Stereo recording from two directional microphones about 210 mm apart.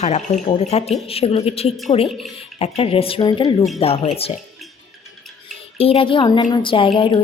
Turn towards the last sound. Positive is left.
turn(degrees=25)  # may be behind; listen again after turning